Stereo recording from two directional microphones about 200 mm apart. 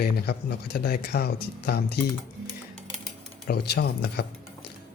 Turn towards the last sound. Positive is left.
turn(degrees=55)  # may be behind; listen again after turning